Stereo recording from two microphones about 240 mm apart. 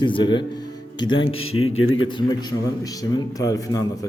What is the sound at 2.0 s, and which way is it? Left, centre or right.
A man's voice, centre.